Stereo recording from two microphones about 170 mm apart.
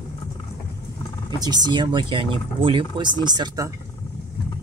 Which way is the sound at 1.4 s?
25° right (ahead or behind).